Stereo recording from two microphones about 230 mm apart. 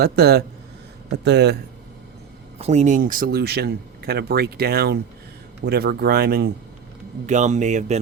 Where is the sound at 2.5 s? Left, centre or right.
Right.